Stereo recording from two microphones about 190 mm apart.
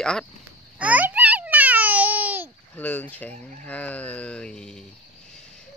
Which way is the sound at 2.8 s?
10° left (ahead or behind).